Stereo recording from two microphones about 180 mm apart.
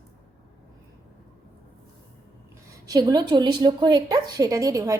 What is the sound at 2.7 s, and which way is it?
A woman's voice, 20° right (ahead or behind).